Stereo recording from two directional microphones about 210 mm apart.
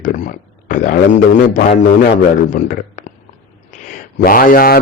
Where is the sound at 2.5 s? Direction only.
40° left (ahead or behind).